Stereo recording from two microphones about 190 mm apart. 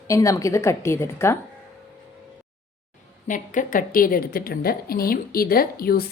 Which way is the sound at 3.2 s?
45° left (ahead or behind).